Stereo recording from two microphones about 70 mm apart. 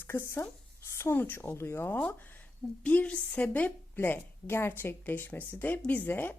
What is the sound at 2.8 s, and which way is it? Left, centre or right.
A woman's voice, left.